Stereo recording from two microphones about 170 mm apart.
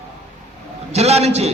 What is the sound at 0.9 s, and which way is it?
Speech, 40° right (ahead or behind).